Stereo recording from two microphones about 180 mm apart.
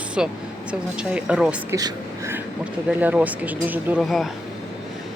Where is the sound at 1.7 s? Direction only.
15° right (ahead or behind).